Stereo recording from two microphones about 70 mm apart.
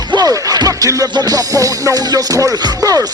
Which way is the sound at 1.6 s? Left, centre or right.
Right.